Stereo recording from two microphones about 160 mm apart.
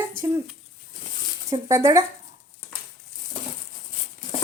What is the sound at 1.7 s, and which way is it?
Speech, 20° right (ahead or behind).